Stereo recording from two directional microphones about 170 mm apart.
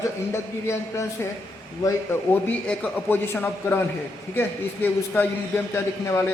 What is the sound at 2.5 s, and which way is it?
A man's voice, 10° left (ahead or behind).